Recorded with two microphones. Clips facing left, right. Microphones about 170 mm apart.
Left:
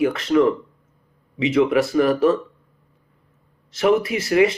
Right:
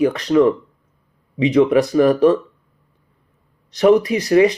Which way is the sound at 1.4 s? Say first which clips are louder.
Right 4 dB; 20° right (ahead or behind).